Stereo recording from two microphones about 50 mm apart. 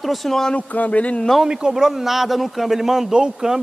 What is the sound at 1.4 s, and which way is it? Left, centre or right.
A man's voice, centre.